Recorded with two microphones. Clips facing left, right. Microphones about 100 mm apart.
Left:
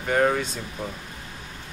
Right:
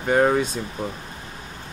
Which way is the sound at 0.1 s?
20° right (ahead or behind).